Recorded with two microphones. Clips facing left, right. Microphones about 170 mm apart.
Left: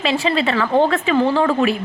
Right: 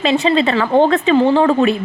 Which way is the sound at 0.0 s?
30° right (ahead or behind).